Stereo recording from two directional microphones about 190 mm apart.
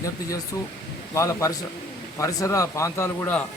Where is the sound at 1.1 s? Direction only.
15° left (ahead or behind).